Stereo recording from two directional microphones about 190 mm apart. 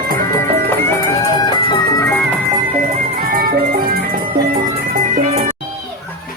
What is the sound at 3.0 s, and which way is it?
Music, 50° right (ahead or behind).